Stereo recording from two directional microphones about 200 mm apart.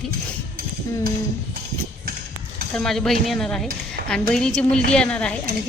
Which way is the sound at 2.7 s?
5° left (ahead or behind).